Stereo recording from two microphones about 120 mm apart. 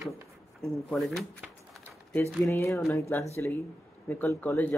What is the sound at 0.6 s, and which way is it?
Speech, centre (ahead or behind).